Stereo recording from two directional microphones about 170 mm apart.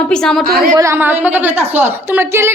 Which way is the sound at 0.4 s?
60° right (ahead or behind).